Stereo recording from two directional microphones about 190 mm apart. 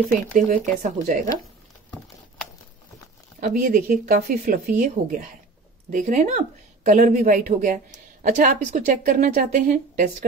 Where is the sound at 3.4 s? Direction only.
45° right (ahead or behind).